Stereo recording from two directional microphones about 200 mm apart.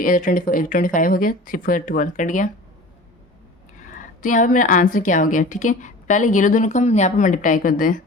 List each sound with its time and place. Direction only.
0.0 s speech: 40° left (ahead or behind)
3.9 s a woman's voice: 40° left (ahead or behind)